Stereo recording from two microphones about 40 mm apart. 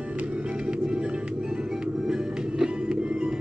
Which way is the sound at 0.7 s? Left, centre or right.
Right.